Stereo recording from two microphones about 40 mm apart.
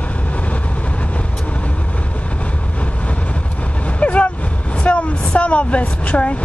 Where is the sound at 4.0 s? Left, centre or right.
Left.